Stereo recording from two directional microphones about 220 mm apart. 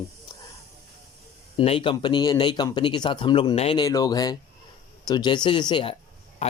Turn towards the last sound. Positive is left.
turn(degrees=30)  # may be behind; listen again after turning